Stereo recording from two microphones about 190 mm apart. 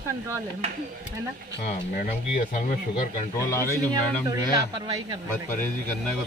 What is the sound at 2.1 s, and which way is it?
Speech, 40° left (ahead or behind).